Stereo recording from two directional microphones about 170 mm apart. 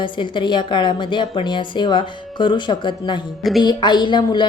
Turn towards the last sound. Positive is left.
turn(degrees=25)  # may be behind; listen again after turning